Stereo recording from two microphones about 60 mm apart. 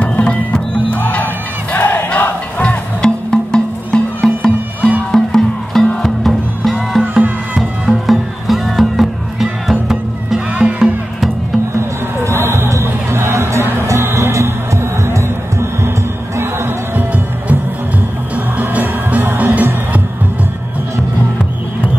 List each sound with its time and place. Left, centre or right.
0.0 s music: left
0.9 s music: left; by 10.9 s centre
12.3 s music: right
18.3 s music: right